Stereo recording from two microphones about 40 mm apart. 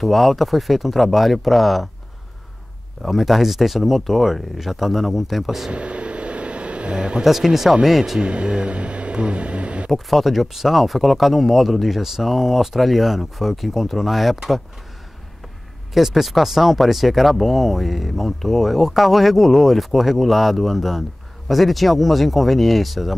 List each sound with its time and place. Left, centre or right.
0.0 s speech: centre
3.0 s speech: centre
5.7 s vehicle: right
7.2 s speech: centre
8.2 s speech: right
9.8 s speech: centre
15.9 s speech: centre